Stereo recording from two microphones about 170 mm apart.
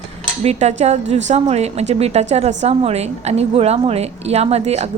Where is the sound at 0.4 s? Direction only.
40° right (ahead or behind).